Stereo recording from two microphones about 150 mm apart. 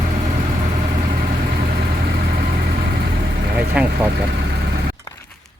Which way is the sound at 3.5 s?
10° right (ahead or behind).